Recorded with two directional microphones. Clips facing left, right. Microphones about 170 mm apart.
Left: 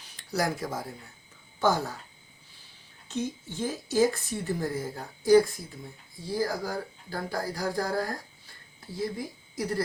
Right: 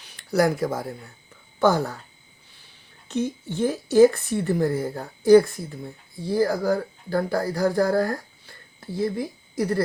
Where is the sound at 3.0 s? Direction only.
65° right (ahead or behind).